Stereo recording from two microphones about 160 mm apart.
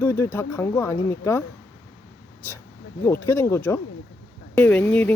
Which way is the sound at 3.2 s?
15° left (ahead or behind).